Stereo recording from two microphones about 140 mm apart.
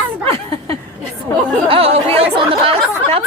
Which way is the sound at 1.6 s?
45° right (ahead or behind).